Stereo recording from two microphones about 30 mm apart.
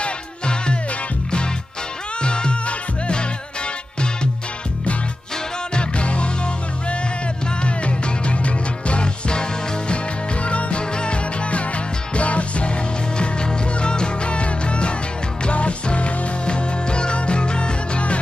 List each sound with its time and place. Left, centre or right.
0.0 s music: left
2.2 s music: left
5.8 s music: left
7.6 s music: left
10.4 s music: left
12.2 s music: left
13.2 s music: left